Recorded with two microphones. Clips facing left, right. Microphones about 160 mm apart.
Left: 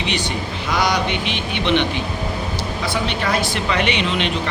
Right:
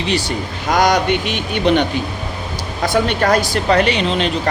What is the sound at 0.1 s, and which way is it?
Speech, 40° right (ahead or behind).